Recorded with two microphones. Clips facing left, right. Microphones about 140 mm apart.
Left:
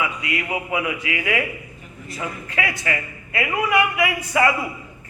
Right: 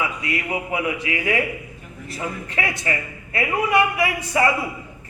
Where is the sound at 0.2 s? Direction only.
35° right (ahead or behind).